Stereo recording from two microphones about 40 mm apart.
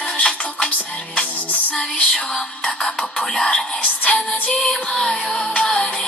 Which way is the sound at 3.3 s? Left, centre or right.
Centre.